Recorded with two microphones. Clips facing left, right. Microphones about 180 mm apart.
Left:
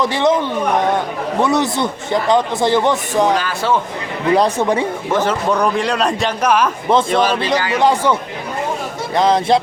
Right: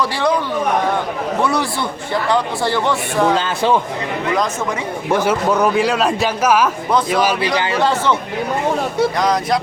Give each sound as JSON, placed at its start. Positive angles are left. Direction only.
{"t": 0.0, "sound": "speech", "side_deg": 20}
{"t": 3.3, "sound": "speech", "side_deg": -20}
{"t": 4.4, "sound": "speech", "side_deg": 30}
{"t": 5.1, "sound": "speech", "side_deg": -10}
{"t": 9.1, "sound": "speech", "side_deg": 25}